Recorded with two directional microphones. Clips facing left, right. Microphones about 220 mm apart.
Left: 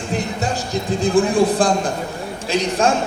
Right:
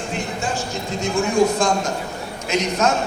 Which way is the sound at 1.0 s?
35° left (ahead or behind).